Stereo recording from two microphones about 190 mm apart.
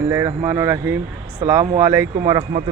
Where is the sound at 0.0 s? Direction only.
15° right (ahead or behind).